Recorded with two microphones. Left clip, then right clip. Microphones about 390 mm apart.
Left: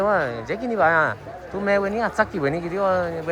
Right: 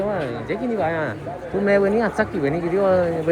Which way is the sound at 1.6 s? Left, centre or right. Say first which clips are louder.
Right 3 dB; centre.